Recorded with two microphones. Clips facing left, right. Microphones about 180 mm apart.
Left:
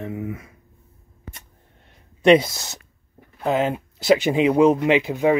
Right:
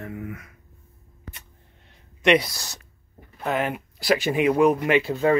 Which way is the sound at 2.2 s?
30° left (ahead or behind).